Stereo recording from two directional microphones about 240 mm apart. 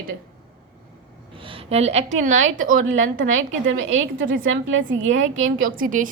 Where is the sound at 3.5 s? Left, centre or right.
Right.